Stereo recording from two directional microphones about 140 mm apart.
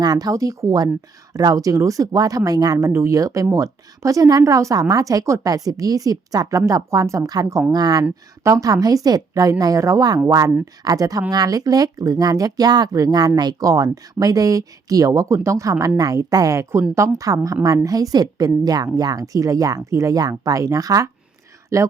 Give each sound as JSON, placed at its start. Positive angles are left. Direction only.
{"t": 0.0, "sound": "speech", "side_deg": -25}